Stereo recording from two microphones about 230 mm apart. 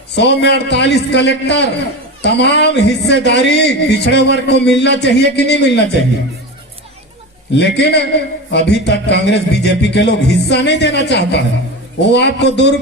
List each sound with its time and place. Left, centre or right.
0.2 s a man's voice: left
7.5 s a man's voice: left